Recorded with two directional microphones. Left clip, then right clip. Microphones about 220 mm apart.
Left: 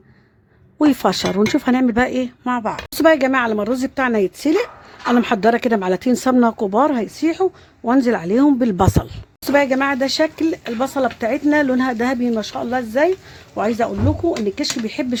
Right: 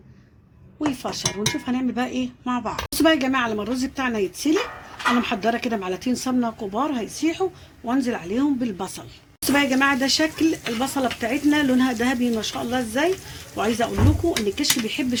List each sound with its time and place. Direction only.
0.9 s a woman's voice: 50° left (ahead or behind)